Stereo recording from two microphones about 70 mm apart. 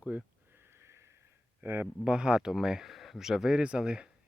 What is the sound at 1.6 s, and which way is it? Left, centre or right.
Speech, right.